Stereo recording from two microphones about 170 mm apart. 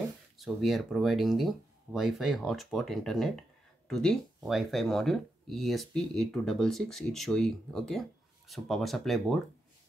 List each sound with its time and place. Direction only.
0.4 s speech: centre (ahead or behind)